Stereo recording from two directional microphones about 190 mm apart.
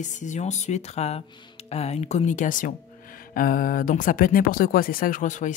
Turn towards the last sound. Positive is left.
turn(degrees=40)  # may be behind; listen again after turning